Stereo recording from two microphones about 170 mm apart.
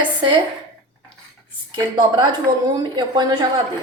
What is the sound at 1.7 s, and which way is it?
A woman's voice, 25° right (ahead or behind).